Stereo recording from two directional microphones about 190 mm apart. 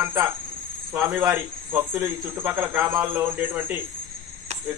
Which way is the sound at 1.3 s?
15° right (ahead or behind).